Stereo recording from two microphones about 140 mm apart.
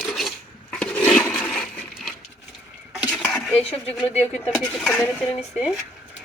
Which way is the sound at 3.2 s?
Centre (ahead or behind).